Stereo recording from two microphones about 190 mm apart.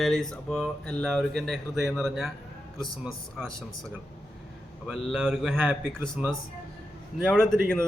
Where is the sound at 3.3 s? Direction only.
Centre (ahead or behind).